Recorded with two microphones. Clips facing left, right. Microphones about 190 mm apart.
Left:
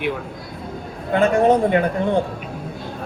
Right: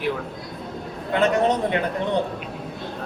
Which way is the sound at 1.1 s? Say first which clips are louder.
Left 4 dB; 50° left (ahead or behind).